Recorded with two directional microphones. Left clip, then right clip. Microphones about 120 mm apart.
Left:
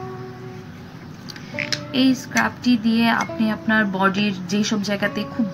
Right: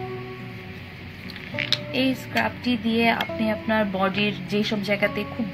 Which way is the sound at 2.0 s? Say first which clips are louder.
Left 7 dB; 15° right (ahead or behind).